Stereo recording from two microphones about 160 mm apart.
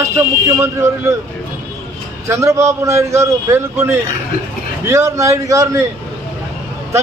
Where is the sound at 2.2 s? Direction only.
20° right (ahead or behind).